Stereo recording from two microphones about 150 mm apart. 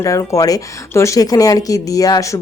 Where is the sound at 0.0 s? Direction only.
20° left (ahead or behind).